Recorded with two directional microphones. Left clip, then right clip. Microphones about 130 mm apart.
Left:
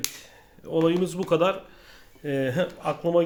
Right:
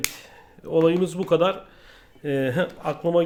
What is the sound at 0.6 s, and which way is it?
Speech, 35° right (ahead or behind).